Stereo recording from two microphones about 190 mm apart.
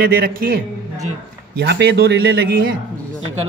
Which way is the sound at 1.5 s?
60° right (ahead or behind).